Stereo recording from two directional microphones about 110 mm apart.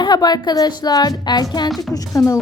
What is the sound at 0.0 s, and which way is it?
Speech, 40° left (ahead or behind).